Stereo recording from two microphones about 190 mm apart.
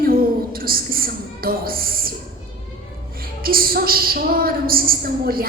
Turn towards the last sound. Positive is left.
turn(degrees=-50)  # may be behind; listen again after turning